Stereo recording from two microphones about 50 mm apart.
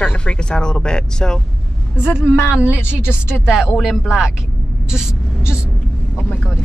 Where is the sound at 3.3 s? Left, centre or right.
Centre.